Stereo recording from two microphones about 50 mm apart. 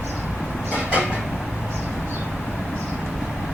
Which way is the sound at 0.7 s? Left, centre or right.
Right.